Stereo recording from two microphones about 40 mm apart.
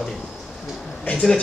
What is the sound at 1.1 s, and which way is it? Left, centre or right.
Speech, left.